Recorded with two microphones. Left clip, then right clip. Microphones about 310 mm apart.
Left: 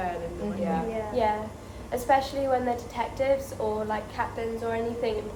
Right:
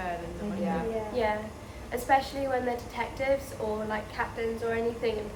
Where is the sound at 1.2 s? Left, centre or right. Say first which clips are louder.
Left 5 dB; centre.